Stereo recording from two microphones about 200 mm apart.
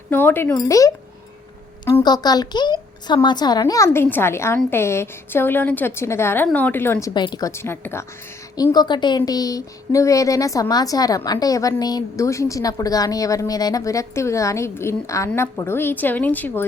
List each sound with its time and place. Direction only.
0.1 s a woman's voice: 10° left (ahead or behind)